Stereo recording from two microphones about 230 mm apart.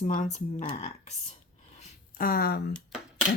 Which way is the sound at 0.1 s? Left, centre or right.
Left.